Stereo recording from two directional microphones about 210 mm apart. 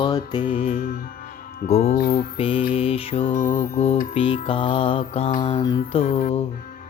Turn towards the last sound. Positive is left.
turn(degrees=25)  # may be behind; listen again after turning